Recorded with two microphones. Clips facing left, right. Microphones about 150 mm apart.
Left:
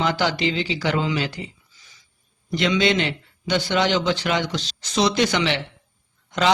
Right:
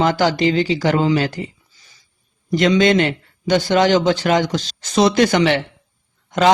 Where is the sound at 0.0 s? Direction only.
45° right (ahead or behind).